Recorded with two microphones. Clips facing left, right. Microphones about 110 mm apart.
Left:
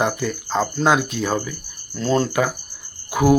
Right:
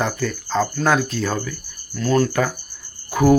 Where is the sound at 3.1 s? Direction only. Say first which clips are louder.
Right 1 dB; 10° left (ahead or behind).